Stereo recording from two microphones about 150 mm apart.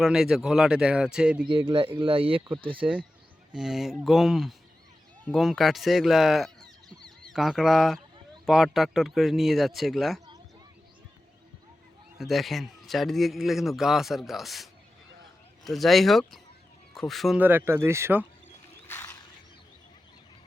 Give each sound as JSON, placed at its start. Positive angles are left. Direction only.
{"t": 0.0, "sound": "a man's voice", "side_deg": -5}
{"t": 1.5, "sound": "speech", "side_deg": -30}
{"t": 3.5, "sound": "a man's voice", "side_deg": -5}
{"t": 12.1, "sound": "a man's voice", "side_deg": 0}
{"t": 17.4, "sound": "speech", "side_deg": -15}
{"t": 18.9, "sound": "a sound", "side_deg": 15}